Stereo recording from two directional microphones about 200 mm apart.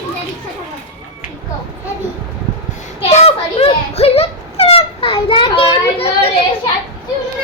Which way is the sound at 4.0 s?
30° left (ahead or behind).